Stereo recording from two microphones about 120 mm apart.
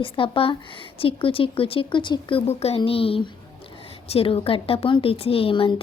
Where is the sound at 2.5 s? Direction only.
60° left (ahead or behind).